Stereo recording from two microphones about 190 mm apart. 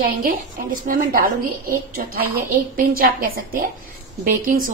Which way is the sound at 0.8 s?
50° right (ahead or behind).